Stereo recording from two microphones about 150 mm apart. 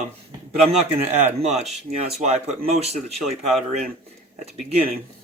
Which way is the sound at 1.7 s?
45° right (ahead or behind).